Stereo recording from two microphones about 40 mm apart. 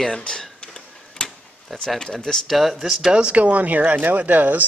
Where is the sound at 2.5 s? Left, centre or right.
Centre.